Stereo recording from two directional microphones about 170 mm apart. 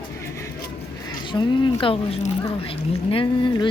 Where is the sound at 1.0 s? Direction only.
30° left (ahead or behind).